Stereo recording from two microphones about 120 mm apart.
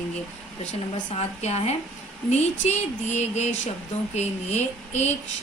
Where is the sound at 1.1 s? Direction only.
65° left (ahead or behind).